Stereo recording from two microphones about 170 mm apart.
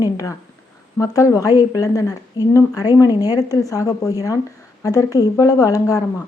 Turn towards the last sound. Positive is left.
turn(degrees=20)  # may be behind; listen again after turning